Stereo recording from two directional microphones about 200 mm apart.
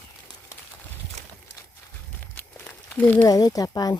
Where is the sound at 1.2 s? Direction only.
35° right (ahead or behind).